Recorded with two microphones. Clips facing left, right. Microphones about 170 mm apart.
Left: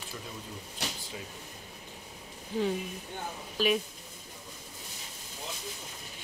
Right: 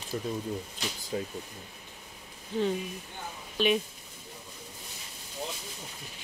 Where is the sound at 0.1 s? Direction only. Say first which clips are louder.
Right 12 dB; 50° right (ahead or behind).